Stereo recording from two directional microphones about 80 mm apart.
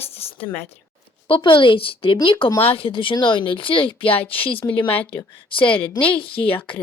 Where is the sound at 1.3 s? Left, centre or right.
Left.